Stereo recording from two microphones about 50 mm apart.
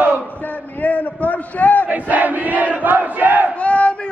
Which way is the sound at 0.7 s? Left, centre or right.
Left.